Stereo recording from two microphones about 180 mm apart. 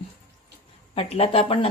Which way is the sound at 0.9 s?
30° left (ahead or behind).